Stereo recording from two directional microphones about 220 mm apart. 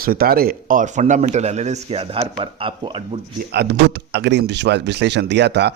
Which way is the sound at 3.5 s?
50° right (ahead or behind).